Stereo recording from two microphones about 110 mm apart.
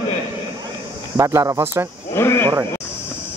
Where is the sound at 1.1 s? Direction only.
25° right (ahead or behind).